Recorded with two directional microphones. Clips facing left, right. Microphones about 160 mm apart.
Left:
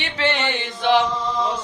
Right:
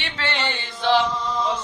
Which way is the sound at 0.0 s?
15° left (ahead or behind).